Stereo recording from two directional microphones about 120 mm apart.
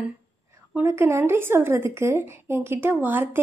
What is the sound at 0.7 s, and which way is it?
Speech, 20° right (ahead or behind).